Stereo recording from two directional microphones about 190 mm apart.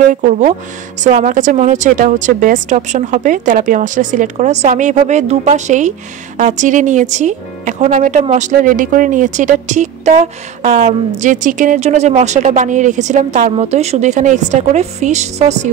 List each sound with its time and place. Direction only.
0.1 s speech: 40° right (ahead or behind)